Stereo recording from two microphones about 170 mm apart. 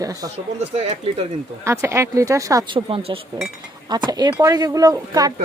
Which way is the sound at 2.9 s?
35° right (ahead or behind).